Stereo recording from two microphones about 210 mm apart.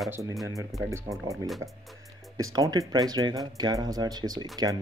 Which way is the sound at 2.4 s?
15° right (ahead or behind).